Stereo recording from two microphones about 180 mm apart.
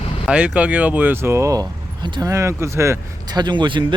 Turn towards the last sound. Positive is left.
turn(degrees=-25)  # may be behind; listen again after turning